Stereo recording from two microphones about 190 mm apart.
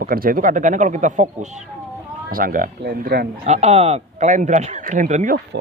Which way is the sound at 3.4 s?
35° right (ahead or behind).